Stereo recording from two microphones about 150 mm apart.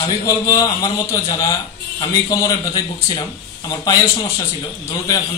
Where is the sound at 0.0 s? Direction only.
25° left (ahead or behind).